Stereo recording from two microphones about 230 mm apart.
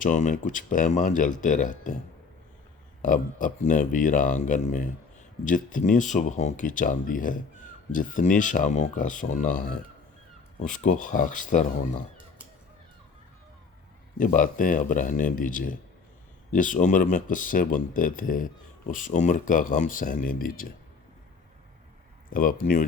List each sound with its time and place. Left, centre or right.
0.0 s speech: left
3.0 s speech: left
10.8 s speech: left
14.2 s speech: left
22.3 s speech: left